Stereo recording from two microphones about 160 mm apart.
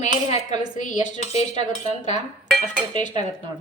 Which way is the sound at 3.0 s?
50° left (ahead or behind).